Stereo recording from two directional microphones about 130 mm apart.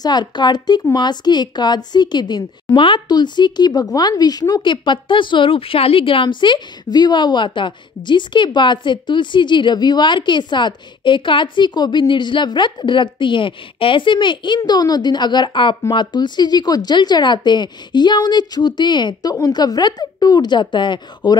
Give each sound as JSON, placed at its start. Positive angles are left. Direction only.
{"t": 0.0, "sound": "a woman's voice", "side_deg": 35}